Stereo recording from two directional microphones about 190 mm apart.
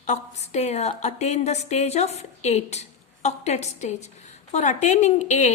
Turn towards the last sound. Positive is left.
turn(degrees=40)  # may be behind; listen again after turning